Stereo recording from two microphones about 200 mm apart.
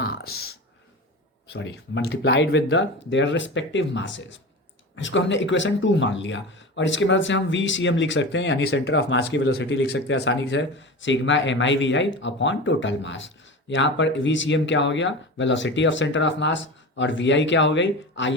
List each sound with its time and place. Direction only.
0.0 s clicking: 50° left (ahead or behind)
1.5 s speech: 60° left (ahead or behind)